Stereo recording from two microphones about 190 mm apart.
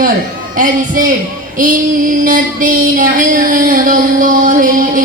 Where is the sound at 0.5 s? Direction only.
45° right (ahead or behind).